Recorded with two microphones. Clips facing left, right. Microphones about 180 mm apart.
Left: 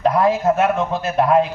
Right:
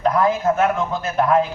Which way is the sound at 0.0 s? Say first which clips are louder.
Left 2 dB; 25° left (ahead or behind).